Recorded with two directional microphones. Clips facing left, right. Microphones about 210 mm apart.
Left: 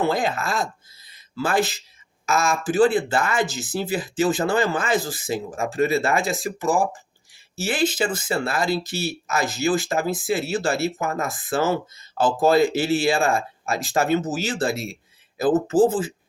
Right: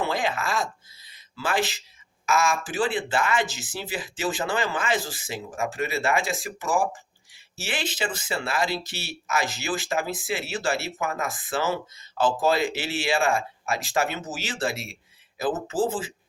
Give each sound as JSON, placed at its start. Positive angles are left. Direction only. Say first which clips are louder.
{"t": 0.2, "sound": "speech", "louder": "left 3 dB", "side_deg": 40}